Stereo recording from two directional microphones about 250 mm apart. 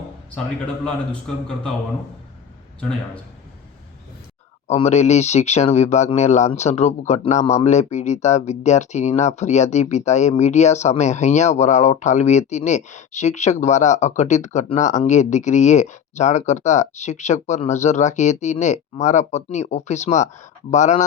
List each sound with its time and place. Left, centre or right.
4.7 s speech: left